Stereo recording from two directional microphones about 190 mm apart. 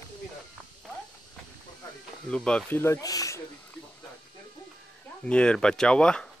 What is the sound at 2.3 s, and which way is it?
Speech, 5° left (ahead or behind).